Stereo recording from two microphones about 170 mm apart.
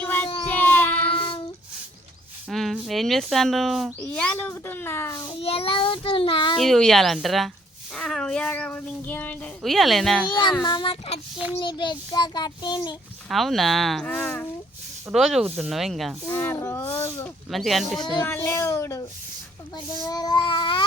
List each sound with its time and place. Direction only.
0.0 s child singing: 10° left (ahead or behind)
1.1 s child singing: 30° left (ahead or behind)
2.5 s speech: centre (ahead or behind); by 5.3 s 20° left (ahead or behind)
5.4 s child singing: 35° left (ahead or behind)
6.6 s speech: 5° left (ahead or behind)
10.2 s a child's voice: 25° left (ahead or behind)
13.2 s speech: centre (ahead or behind)
16.2 s speech: 15° left (ahead or behind)
17.5 s speech: centre (ahead or behind)
18.2 s a child's voice: 15° left (ahead or behind)